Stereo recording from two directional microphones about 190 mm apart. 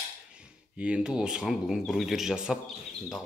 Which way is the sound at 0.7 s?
5° right (ahead or behind).